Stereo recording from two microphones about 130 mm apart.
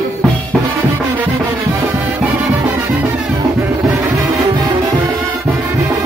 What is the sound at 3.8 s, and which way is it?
Music, 20° right (ahead or behind).